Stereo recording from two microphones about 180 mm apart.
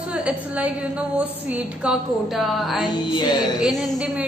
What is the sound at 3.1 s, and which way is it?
Speech, 25° left (ahead or behind).